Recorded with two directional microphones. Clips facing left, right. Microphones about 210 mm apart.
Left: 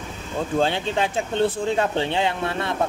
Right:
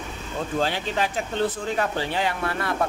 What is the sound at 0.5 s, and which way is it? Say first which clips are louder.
Speech: left 3 dB; 25° left (ahead or behind).